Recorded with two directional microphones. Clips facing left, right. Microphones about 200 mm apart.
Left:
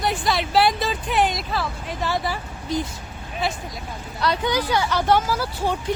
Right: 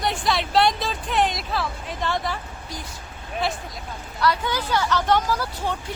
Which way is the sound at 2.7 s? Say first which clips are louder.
Left 13 dB; 25° left (ahead or behind).